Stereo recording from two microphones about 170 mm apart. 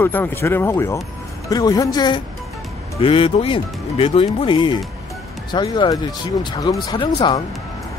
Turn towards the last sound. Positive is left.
turn(degrees=30)  # may be behind; listen again after turning